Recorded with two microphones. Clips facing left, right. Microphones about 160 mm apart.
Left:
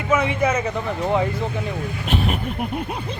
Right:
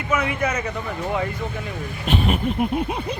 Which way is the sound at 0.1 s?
25° left (ahead or behind).